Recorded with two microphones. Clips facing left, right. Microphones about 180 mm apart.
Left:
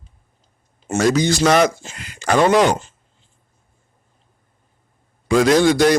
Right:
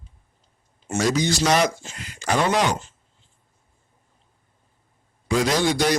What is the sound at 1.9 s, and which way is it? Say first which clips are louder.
Speech: left 5 dB; 75° left (ahead or behind).